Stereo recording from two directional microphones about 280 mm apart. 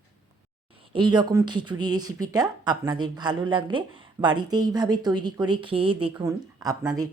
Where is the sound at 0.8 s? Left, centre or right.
Centre.